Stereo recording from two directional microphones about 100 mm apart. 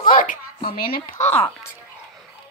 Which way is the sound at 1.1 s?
25° left (ahead or behind).